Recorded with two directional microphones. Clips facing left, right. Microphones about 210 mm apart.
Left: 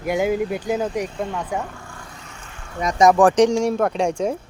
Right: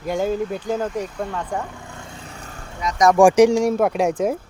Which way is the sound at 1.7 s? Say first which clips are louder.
Right 2 dB; 20° right (ahead or behind).